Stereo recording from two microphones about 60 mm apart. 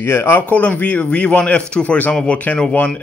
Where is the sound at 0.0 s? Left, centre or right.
Left.